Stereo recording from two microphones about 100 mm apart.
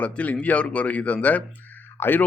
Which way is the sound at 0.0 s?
15° left (ahead or behind).